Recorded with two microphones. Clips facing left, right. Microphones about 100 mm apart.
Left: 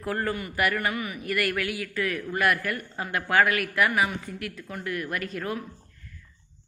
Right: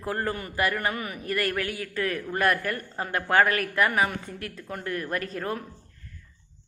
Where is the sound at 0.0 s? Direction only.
25° right (ahead or behind).